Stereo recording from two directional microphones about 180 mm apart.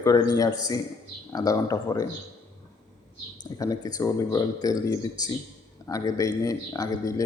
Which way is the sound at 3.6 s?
20° left (ahead or behind).